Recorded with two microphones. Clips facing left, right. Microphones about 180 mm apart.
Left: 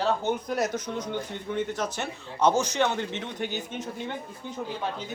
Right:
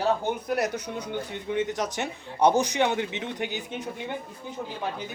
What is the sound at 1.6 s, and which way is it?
A man's voice, 15° right (ahead or behind).